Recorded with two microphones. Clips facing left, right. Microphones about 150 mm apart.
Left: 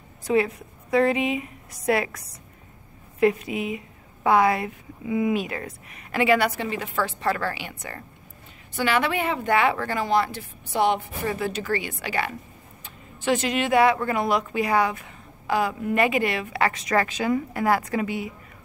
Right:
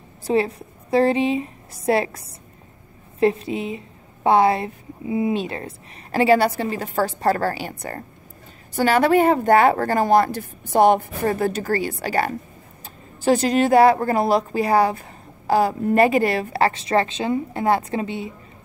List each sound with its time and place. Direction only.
0.2 s a woman's voice: 30° right (ahead or behind)